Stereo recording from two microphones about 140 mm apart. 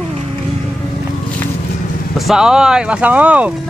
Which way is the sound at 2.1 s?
Centre (ahead or behind).